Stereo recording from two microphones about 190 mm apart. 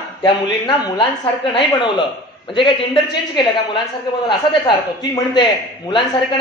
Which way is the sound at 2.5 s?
25° left (ahead or behind).